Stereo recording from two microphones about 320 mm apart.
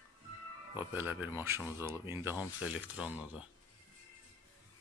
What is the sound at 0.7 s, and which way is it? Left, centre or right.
Speech, centre.